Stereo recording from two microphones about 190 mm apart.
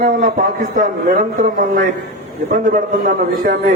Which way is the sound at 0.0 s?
45° right (ahead or behind).